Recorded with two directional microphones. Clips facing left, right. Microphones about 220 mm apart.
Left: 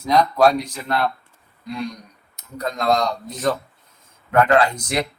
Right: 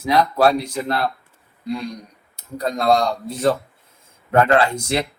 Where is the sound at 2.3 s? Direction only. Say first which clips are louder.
Right 3 dB; 30° right (ahead or behind).